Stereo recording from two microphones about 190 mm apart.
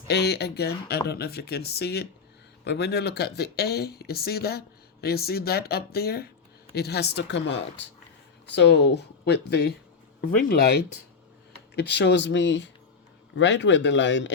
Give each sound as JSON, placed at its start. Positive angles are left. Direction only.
{"t": 0.1, "sound": "speech", "side_deg": 60}